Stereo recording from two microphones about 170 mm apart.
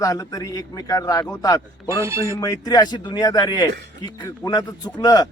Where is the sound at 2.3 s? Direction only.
20° left (ahead or behind).